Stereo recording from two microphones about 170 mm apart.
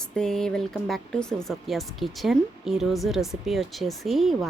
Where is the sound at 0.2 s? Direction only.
5° left (ahead or behind).